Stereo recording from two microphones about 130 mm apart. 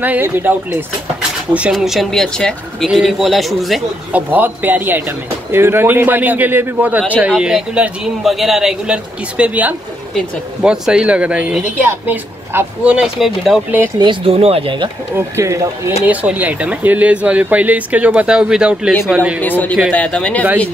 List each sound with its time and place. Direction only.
0.0 s speech: 15° right (ahead or behind)
4.1 s speech: 15° right (ahead or behind)
13.9 s speech: 40° right (ahead or behind)
15.1 s speech: 20° right (ahead or behind)
16.1 s speech: 10° right (ahead or behind)
19.4 s speech: 15° left (ahead or behind)